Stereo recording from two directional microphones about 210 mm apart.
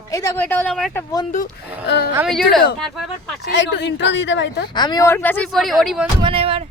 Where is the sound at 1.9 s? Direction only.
50° left (ahead or behind).